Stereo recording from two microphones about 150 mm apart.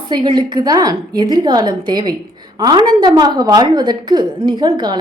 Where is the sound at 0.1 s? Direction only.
30° right (ahead or behind).